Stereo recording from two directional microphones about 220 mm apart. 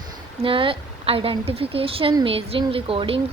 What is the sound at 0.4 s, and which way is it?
A woman's voice, 25° right (ahead or behind).